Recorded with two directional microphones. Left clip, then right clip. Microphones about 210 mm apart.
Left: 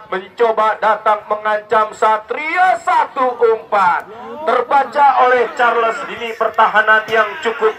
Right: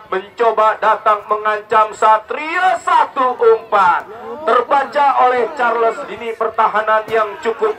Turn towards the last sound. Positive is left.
turn(degrees=20)  # may be behind; listen again after turning